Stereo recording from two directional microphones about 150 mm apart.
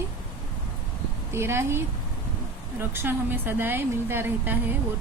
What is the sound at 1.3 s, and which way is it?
A woman's voice, 15° right (ahead or behind).